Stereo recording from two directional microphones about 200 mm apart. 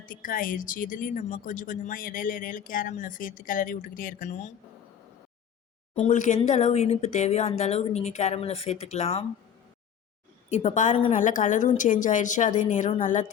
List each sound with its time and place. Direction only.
0.0 s a woman's voice: 45° left (ahead or behind)
5.9 s a woman's voice: 35° left (ahead or behind)
10.5 s a woman's voice: 35° left (ahead or behind)